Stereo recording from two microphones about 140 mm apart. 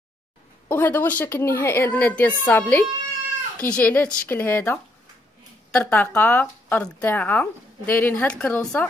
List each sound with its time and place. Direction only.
0.7 s speech: 15° left (ahead or behind)